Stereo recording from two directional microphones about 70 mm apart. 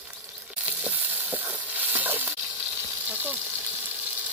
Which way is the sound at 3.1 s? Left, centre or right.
Right.